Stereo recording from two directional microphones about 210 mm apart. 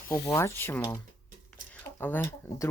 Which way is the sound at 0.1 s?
15° left (ahead or behind).